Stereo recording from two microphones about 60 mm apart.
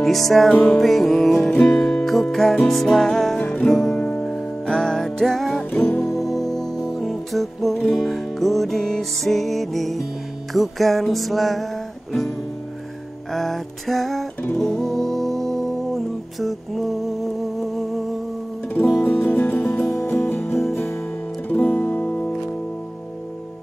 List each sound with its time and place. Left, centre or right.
0.0 s music: centre
3.3 s music: centre
3.6 s music: centre
3.9 s music: left
4.2 s music: centre
13.3 s music: centre
19.0 s music: left
19.9 s music: left
21.5 s music: left